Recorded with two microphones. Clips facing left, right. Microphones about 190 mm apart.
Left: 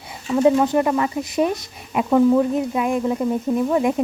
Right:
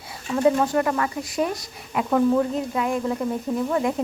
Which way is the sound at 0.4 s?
20° left (ahead or behind).